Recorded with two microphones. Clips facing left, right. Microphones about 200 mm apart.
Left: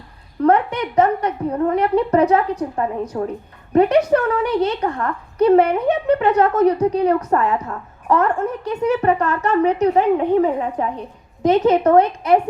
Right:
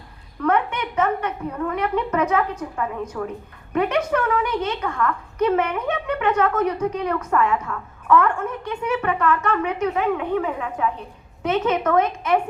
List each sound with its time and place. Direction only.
0.4 s a woman's voice: 35° left (ahead or behind)